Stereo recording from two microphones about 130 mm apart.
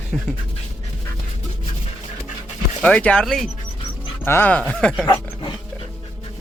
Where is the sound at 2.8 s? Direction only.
10° left (ahead or behind).